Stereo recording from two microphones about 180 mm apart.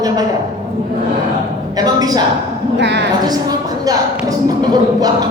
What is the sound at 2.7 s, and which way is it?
Speech, 70° right (ahead or behind).